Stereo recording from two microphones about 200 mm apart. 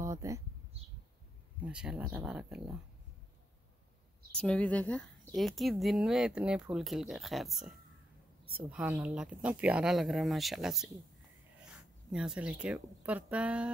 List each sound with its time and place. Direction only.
0.0 s a sound: 15° right (ahead or behind)
1.6 s a woman's voice: 5° right (ahead or behind)
4.4 s a woman's voice: 5° left (ahead or behind)
12.1 s speech: 5° right (ahead or behind)